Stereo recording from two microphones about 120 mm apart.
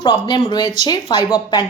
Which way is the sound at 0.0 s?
40° left (ahead or behind).